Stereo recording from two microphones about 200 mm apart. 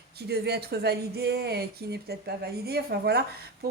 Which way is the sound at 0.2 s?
55° right (ahead or behind).